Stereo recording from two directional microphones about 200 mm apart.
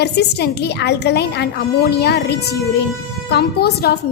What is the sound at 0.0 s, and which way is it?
A woman's voice, 55° left (ahead or behind).